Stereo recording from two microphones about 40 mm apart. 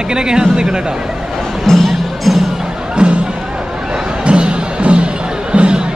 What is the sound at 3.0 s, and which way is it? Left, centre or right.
Music, right.